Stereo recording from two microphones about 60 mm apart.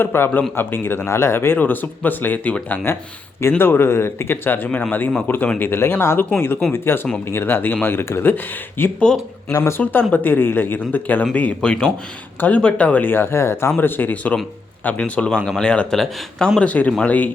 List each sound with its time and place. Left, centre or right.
0.0 s speech: left
1.5 s speech: left
2.9 s speech: left
9.5 s speech: left
9.7 s speech: left
13.7 s speech: left; by 16.0 s centre
16.6 s speech: left